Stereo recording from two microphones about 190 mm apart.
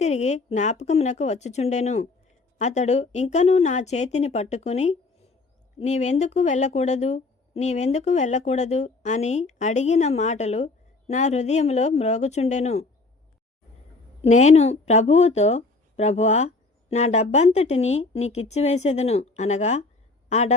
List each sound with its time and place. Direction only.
0.0 s speech: 35° left (ahead or behind)
14.2 s speech: 35° left (ahead or behind)